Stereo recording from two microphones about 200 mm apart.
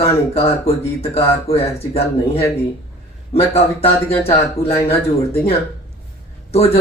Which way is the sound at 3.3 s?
30° left (ahead or behind).